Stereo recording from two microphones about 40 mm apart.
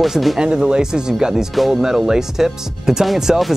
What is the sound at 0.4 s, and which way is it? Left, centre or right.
Speech, centre.